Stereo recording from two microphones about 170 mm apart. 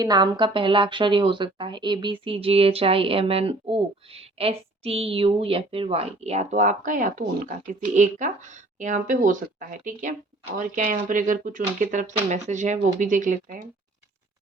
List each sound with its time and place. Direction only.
0.0 s a woman's voice: 25° right (ahead or behind); by 13.6 s 50° right (ahead or behind)